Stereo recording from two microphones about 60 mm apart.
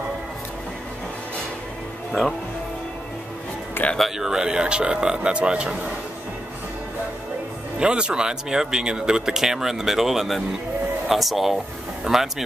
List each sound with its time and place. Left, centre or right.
3.8 s speech: left
4.2 s speech: centre
7.8 s speech: centre